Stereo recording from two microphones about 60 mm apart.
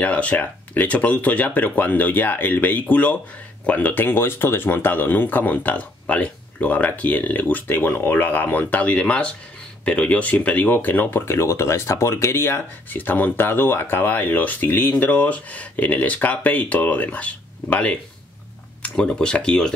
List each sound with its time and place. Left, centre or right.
0.0 s speech: left